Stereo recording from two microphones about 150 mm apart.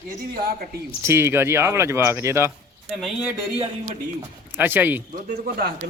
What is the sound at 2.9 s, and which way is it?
Speech, 5° right (ahead or behind).